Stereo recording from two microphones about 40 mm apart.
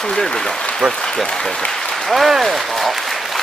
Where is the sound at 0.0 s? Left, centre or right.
Centre.